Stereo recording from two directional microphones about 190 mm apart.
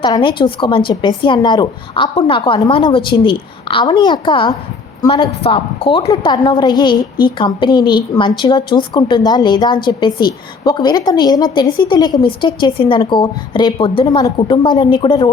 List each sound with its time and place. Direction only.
0.0 s a woman's voice: 25° left (ahead or behind)